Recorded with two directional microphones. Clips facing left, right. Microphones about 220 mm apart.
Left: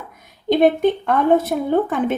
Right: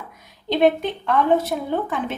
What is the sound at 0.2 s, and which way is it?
A woman's voice, 50° left (ahead or behind).